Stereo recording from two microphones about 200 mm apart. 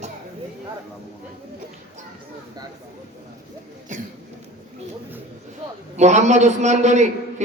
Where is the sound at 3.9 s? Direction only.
40° right (ahead or behind).